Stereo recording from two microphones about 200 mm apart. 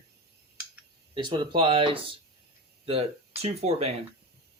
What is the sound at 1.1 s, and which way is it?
Speech, 25° right (ahead or behind).